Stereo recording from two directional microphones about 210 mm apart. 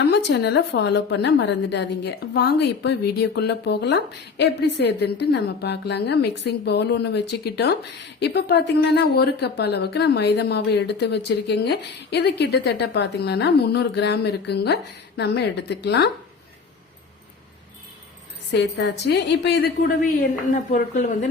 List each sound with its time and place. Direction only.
0.1 s a woman's voice: 55° left (ahead or behind)
18.5 s a woman's voice: 55° left (ahead or behind)
20.5 s speech: 40° left (ahead or behind)